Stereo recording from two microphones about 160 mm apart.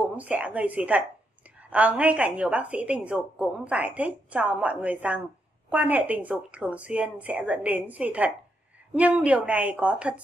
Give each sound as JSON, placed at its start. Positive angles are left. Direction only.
{"t": 0.1, "sound": "a woman's voice", "side_deg": -10}